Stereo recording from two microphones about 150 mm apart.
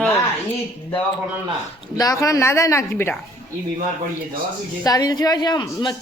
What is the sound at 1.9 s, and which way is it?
Speech, 25° left (ahead or behind).